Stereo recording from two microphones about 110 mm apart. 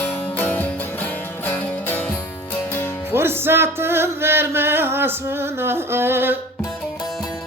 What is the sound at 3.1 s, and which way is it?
Music, 20° right (ahead or behind).